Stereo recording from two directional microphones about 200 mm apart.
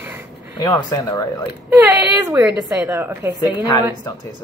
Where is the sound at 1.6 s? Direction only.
10° right (ahead or behind).